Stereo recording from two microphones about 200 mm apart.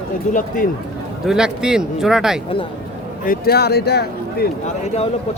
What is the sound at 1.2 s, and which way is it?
Speech, 5° right (ahead or behind).